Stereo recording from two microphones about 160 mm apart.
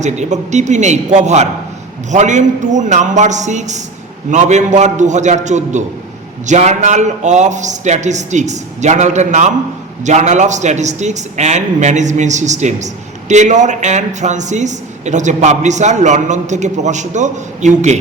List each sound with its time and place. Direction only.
0.0 s a man's voice: 45° right (ahead or behind)